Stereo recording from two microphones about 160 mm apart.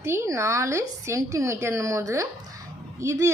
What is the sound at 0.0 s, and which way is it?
A woman's voice, 15° right (ahead or behind).